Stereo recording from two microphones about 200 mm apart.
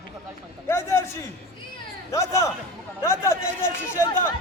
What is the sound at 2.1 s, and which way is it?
Speech, 15° left (ahead or behind).